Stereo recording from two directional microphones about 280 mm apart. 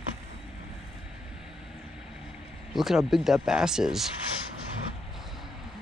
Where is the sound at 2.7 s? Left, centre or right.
Centre.